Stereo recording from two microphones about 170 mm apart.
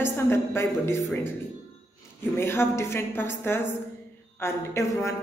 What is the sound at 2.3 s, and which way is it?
A woman's voice, 15° left (ahead or behind).